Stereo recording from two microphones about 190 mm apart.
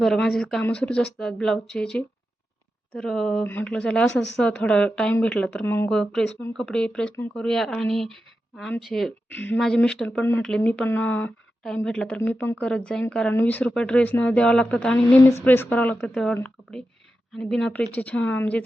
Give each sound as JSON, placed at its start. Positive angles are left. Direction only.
{"t": 0.0, "sound": "speech", "side_deg": 0}
{"t": 3.0, "sound": "speech", "side_deg": 5}